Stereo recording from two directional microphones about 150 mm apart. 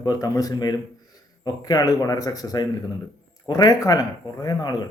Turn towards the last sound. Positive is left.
turn(degrees=25)  # may be behind; listen again after turning